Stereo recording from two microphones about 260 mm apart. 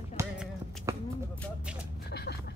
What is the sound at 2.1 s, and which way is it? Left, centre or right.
Speech, left.